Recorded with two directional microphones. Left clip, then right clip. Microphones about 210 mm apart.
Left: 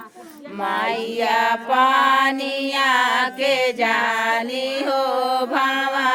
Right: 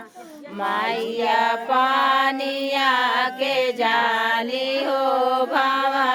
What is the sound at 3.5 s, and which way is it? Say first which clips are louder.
Music: left 2 dB; 40° left (ahead or behind).